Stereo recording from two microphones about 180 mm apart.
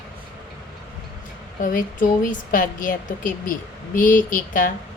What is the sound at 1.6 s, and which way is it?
A woman's voice, 50° left (ahead or behind).